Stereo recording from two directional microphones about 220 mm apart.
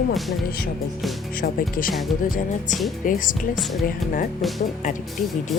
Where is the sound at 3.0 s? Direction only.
40° left (ahead or behind).